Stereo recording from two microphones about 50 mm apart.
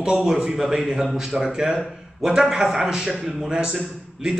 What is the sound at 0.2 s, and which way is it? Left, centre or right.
A man's voice, centre.